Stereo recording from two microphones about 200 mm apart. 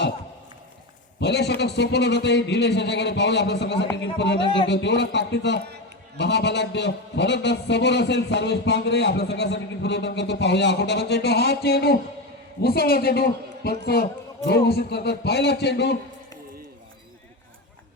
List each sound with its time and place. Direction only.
1.2 s a man's voice: 60° left (ahead or behind)
4.4 s speech: 25° left (ahead or behind)
4.7 s a man's voice: 60° left (ahead or behind)